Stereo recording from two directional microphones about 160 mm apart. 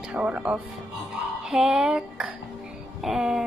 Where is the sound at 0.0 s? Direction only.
5° right (ahead or behind).